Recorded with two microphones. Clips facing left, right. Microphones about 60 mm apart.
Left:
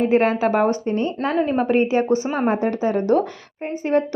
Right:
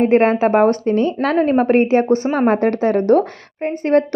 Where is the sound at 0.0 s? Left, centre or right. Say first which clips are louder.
Right 4 dB; right.